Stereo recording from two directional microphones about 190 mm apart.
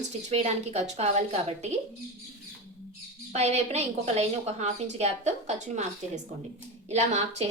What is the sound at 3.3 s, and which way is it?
A woman's voice, 35° right (ahead or behind).